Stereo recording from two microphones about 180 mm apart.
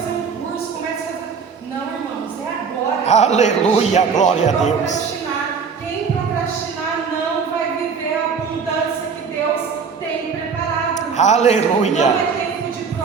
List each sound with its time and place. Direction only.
3.1 s a man's voice: 40° left (ahead or behind)
10.9 s a man's voice: 40° left (ahead or behind)